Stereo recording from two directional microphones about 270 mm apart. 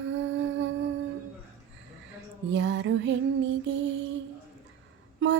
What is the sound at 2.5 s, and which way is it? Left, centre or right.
Music, right.